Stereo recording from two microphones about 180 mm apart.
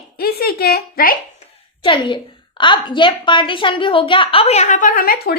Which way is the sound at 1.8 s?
25° left (ahead or behind).